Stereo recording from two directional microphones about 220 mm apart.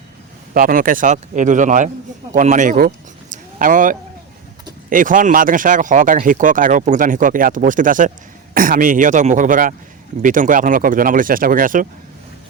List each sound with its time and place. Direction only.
0.5 s speech: 40° right (ahead or behind)